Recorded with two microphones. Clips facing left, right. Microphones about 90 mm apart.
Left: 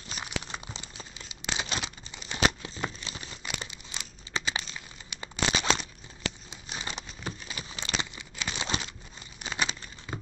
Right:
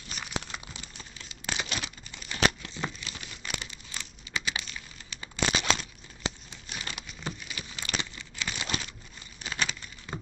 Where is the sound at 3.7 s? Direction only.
15° left (ahead or behind).